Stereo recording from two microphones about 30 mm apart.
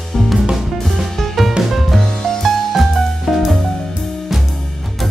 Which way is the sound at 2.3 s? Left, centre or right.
Centre.